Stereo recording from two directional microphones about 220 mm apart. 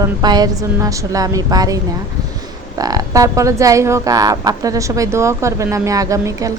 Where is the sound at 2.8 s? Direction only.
15° right (ahead or behind).